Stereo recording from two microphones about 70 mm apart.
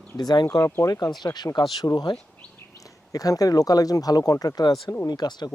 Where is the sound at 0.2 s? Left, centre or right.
Left.